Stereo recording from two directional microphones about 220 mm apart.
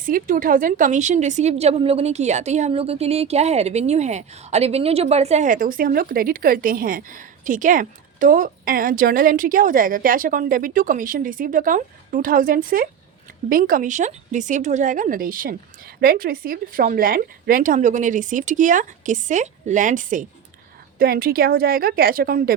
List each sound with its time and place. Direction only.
0.0 s a woman's voice: 40° right (ahead or behind)